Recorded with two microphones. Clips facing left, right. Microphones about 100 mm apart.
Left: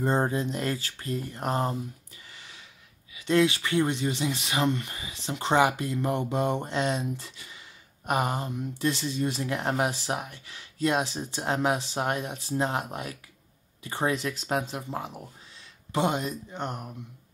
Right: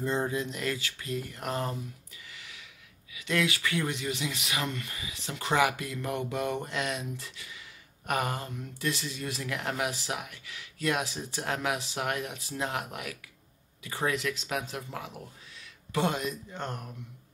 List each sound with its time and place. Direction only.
0.0 s speech: 45° left (ahead or behind)
2.3 s a sound: 30° left (ahead or behind)
3.2 s speech: 30° left (ahead or behind)